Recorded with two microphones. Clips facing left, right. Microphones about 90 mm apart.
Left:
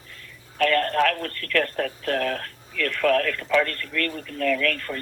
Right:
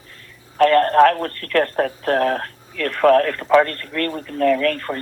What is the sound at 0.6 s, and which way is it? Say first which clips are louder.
Speech: right 8 dB; 40° right (ahead or behind).